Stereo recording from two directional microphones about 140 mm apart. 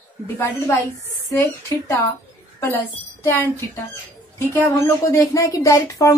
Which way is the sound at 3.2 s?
20° left (ahead or behind).